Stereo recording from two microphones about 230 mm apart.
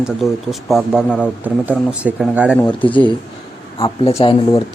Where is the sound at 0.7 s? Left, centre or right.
Centre.